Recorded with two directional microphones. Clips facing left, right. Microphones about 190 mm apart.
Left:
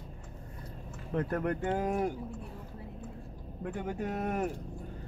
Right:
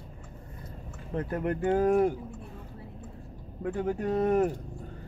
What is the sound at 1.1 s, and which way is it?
Speech, 5° right (ahead or behind).